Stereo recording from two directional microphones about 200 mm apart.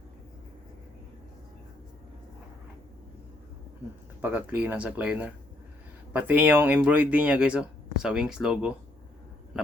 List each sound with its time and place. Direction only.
4.2 s speech: 10° right (ahead or behind)